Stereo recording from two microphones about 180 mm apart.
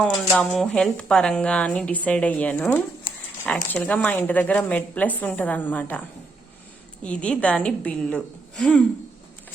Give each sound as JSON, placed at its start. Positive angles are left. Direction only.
{"t": 0.0, "sound": "a woman's voice", "side_deg": 0}
{"t": 7.0, "sound": "a woman's voice", "side_deg": 5}